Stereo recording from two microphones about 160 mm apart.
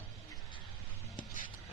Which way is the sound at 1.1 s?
55° left (ahead or behind).